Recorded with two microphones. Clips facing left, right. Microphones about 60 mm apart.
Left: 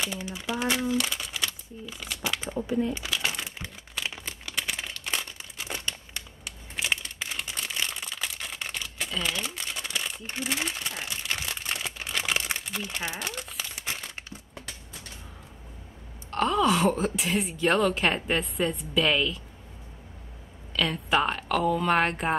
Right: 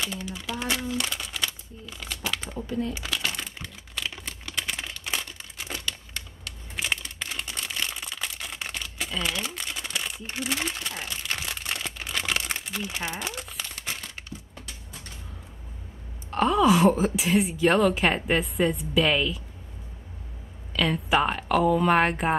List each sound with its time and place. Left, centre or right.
0.1 s speech: centre
3.2 s crumpling: centre
6.8 s a sound: centre
7.9 s crumpling: centre
11.2 s a sound: centre
12.1 s crumpling: centre
14.3 s a sound: left
16.3 s a woman's voice: centre
20.7 s speech: centre